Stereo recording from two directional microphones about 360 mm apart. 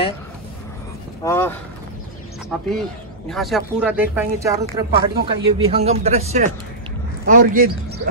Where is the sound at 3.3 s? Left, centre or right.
Centre.